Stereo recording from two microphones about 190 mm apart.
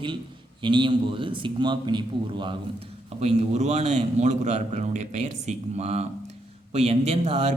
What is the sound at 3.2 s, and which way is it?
A man's voice, 35° right (ahead or behind).